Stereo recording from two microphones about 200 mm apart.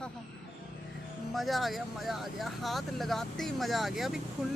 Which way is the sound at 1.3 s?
Centre (ahead or behind).